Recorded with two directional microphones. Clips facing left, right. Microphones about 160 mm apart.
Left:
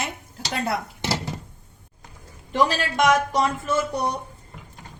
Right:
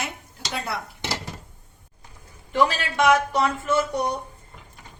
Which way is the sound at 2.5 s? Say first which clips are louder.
Even; 40° left (ahead or behind).